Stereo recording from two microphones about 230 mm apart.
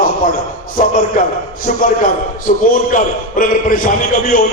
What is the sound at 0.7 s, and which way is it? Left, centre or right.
A man's voice, left.